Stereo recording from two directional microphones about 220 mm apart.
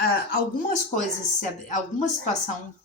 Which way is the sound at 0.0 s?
40° left (ahead or behind).